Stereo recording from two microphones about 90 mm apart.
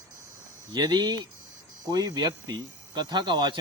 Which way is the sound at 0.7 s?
55° right (ahead or behind).